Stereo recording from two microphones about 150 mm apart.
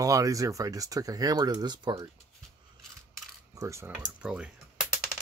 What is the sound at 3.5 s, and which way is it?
Speech, 20° right (ahead or behind).